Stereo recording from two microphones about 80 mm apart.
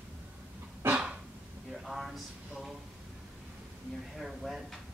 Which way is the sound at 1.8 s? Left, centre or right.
Centre.